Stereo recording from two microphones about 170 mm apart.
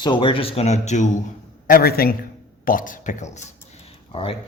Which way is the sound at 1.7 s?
60° left (ahead or behind).